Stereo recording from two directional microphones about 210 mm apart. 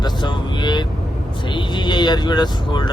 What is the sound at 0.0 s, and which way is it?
Vehicle, 20° left (ahead or behind).